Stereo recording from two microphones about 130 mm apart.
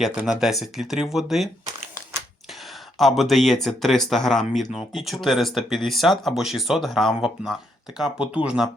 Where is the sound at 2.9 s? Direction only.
Centre (ahead or behind).